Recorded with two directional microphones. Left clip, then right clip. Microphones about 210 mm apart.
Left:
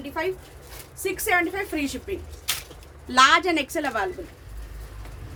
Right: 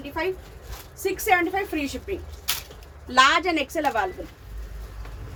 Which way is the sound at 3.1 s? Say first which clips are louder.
Left 1 dB; 15° left (ahead or behind).